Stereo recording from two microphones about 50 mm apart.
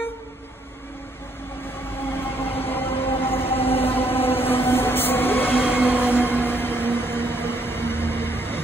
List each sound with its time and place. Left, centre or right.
2.0 s train: left